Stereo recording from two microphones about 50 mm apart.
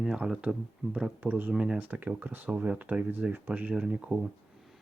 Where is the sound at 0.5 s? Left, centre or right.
Right.